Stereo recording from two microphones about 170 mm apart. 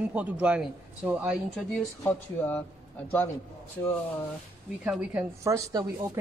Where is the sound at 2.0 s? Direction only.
15° left (ahead or behind).